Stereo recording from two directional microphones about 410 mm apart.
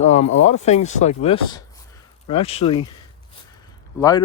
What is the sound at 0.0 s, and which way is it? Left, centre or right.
Speech, centre.